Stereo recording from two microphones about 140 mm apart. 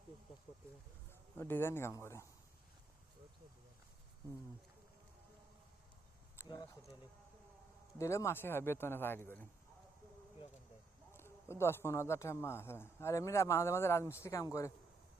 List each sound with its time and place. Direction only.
1.4 s speech: 15° left (ahead or behind)
6.5 s speech: 30° left (ahead or behind)
7.9 s speech: 20° left (ahead or behind)
11.1 s speech: 20° left (ahead or behind)